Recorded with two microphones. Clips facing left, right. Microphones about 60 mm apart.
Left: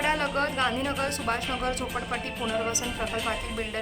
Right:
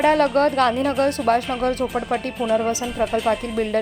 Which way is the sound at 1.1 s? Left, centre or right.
Right.